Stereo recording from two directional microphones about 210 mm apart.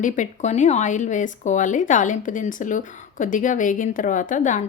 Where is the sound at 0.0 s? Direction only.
35° left (ahead or behind).